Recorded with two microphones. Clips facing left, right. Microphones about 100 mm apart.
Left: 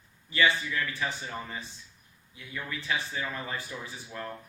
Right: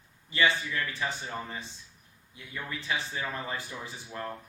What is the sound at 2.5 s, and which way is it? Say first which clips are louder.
Speech: left 1 dB; 25° right (ahead or behind).